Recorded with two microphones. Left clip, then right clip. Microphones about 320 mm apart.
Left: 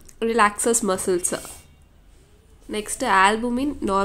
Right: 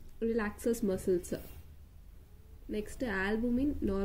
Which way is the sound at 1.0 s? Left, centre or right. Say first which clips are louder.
Left 9 dB; left.